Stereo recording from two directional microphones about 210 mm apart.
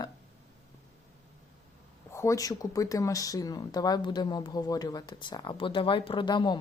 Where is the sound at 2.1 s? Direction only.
15° left (ahead or behind).